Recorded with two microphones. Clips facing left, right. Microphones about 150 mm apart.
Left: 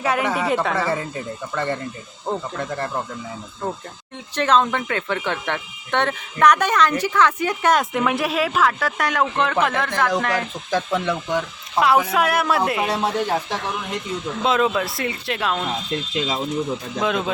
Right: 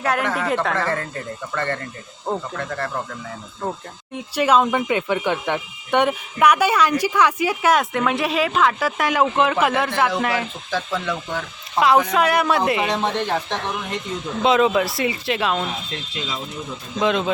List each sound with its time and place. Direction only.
0.0 s speech: centre (ahead or behind); by 2.9 s 15° left (ahead or behind)
3.6 s speech: 10° right (ahead or behind)
10.7 s speech: 20° left (ahead or behind)
11.1 s speech: 5° left (ahead or behind)
17.0 s speech: centre (ahead or behind)